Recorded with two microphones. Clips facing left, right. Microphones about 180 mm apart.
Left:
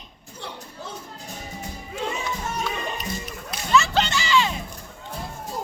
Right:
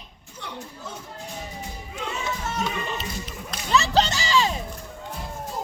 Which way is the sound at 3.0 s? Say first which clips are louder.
Left 1 dB; 30° right (ahead or behind).